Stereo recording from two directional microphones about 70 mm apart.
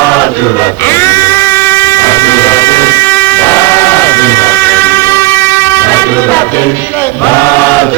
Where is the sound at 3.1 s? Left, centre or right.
Left.